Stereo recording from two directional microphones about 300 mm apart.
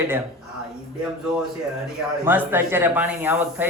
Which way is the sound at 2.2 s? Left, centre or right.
Centre.